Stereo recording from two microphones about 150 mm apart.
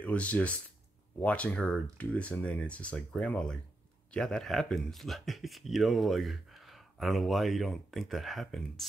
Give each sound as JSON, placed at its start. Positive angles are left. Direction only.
{"t": 0.0, "sound": "speech", "side_deg": 10}